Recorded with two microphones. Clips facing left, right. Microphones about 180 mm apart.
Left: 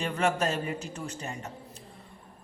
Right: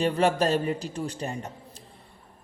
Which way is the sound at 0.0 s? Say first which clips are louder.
Right 5 dB; 35° right (ahead or behind).